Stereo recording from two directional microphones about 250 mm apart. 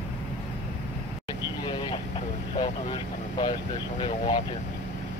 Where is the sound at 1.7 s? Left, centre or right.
Left.